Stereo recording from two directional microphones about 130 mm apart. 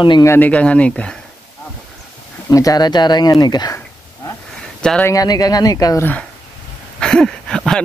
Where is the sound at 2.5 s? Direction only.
25° left (ahead or behind).